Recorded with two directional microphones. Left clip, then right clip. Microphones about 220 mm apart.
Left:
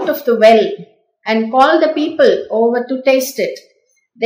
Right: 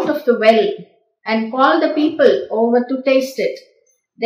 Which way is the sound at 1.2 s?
50° left (ahead or behind).